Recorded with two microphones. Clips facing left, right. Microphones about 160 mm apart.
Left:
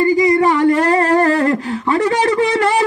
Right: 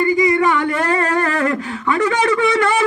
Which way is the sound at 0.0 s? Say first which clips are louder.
Left 3 dB; 35° left (ahead or behind).